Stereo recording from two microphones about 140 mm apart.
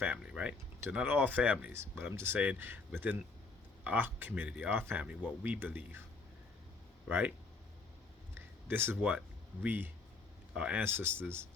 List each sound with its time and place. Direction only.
0.0 s speech: 10° right (ahead or behind)
7.1 s speech: 15° right (ahead or behind)
8.4 s a sound: 15° right (ahead or behind)
9.6 s speech: 15° right (ahead or behind)